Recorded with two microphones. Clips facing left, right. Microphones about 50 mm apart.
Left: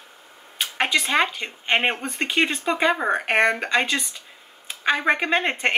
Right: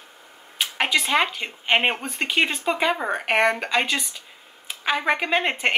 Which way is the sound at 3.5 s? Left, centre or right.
Centre.